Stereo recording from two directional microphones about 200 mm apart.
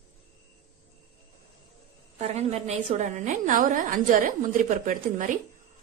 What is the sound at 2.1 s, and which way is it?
A woman's voice, 35° right (ahead or behind).